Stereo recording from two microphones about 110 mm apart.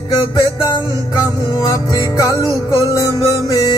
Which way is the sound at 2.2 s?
30° right (ahead or behind).